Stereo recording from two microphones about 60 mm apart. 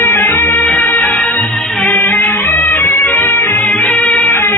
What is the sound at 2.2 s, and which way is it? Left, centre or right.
Music, left.